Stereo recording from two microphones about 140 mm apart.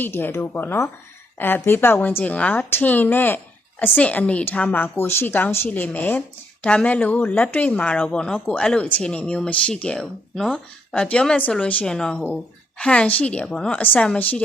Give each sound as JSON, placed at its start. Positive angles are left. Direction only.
{"t": 0.0, "sound": "a woman's voice", "side_deg": 15}